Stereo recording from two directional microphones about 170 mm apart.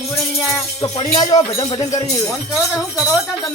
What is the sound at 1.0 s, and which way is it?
Speech, 25° left (ahead or behind).